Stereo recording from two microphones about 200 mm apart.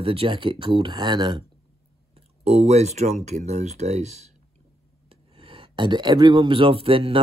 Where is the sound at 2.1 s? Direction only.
30° right (ahead or behind).